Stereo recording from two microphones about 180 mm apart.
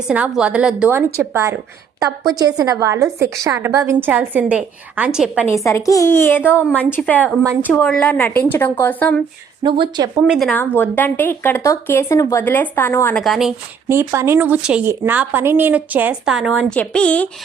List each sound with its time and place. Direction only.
0.1 s a woman's voice: 5° right (ahead or behind)
5.5 s speech: 15° left (ahead or behind)
9.6 s speech: 25° right (ahead or behind)
10.2 s speech: 5° right (ahead or behind)
10.5 s speech: 10° left (ahead or behind)
13.2 s speech: centre (ahead or behind)
13.8 s a woman's voice: 15° right (ahead or behind); by 17.2 s 5° left (ahead or behind)